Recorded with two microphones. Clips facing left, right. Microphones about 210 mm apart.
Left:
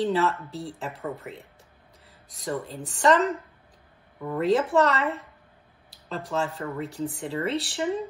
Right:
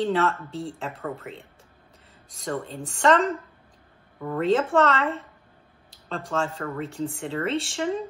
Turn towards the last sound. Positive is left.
turn(degrees=5)  # may be behind; listen again after turning